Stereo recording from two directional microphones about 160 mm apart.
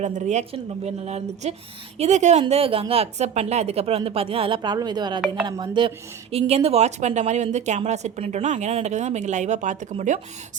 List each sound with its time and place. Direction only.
0.0 s a woman's voice: 45° right (ahead or behind)